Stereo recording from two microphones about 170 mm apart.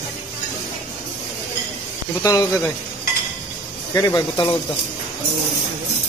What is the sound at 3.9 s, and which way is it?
Speech, 20° left (ahead or behind).